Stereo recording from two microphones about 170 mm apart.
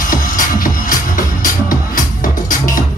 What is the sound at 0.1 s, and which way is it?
Music, 55° left (ahead or behind).